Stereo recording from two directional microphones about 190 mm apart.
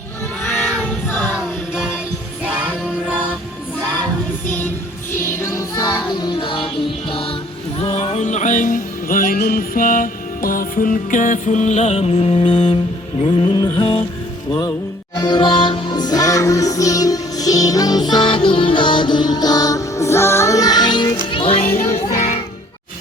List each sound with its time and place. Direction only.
0.7 s choir: 5° left (ahead or behind)
1.4 s music: 5° right (ahead or behind)
5.1 s music: 15° left (ahead or behind)
15.2 s music: 20° left (ahead or behind)
21.7 s music: 10° left (ahead or behind)